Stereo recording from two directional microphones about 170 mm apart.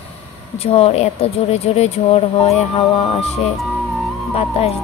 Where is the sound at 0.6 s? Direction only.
35° left (ahead or behind).